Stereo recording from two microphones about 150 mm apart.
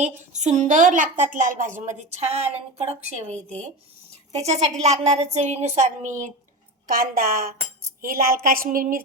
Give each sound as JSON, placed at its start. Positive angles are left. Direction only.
{"t": 0.0, "sound": "a woman's voice", "side_deg": -50}
{"t": 6.8, "sound": "a woman's voice", "side_deg": -75}